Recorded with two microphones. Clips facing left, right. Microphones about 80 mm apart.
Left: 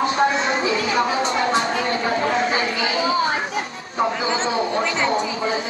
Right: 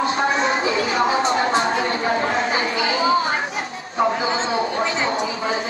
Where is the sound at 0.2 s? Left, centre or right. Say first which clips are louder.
Even; right.